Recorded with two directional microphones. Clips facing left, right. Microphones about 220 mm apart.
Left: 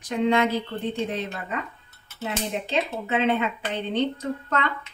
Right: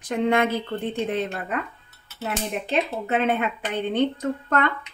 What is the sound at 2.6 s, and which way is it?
Speech, 50° right (ahead or behind).